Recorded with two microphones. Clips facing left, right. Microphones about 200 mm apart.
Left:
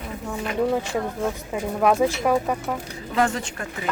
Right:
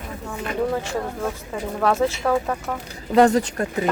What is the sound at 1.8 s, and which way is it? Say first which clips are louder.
Speech: left 1 dB; 15° left (ahead or behind).